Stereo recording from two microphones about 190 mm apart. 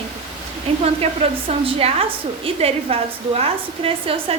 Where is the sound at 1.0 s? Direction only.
35° right (ahead or behind).